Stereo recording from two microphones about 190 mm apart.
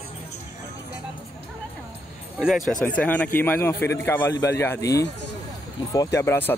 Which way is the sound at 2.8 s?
10° left (ahead or behind).